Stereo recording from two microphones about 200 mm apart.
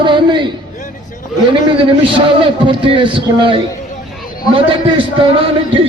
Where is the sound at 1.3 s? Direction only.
Centre (ahead or behind).